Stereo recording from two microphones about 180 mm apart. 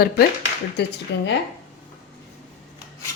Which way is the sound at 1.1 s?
75° left (ahead or behind).